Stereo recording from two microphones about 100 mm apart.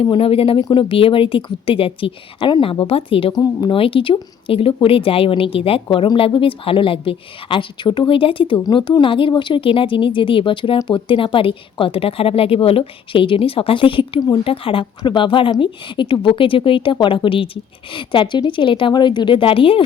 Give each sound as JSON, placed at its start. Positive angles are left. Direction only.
{"t": 0.2, "sound": "speech", "side_deg": 70}
{"t": 3.3, "sound": "speech", "side_deg": 40}
{"t": 3.7, "sound": "speech", "side_deg": 65}